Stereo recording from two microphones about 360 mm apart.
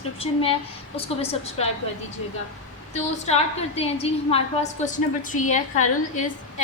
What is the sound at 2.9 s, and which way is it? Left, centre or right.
A woman's voice, centre.